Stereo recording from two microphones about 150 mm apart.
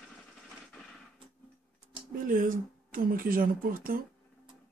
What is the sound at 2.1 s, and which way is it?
Speech, 65° right (ahead or behind).